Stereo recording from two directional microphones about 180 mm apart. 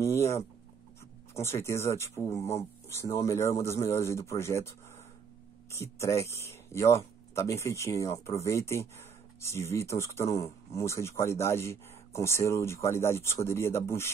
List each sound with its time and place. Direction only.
0.0 s speech: 15° left (ahead or behind)